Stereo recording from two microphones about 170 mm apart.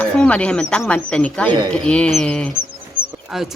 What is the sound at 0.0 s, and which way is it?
A woman's voice, 5° left (ahead or behind).